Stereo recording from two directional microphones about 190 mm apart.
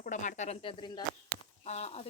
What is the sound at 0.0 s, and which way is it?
Speech, 40° left (ahead or behind).